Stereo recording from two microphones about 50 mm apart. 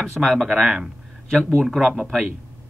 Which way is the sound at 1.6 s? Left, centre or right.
Centre.